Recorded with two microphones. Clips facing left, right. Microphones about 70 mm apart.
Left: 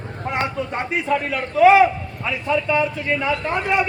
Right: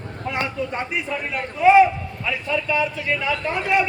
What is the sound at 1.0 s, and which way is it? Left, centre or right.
Speech, left.